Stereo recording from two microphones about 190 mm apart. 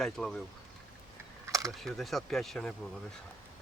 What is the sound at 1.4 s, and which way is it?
Typing, 15° right (ahead or behind).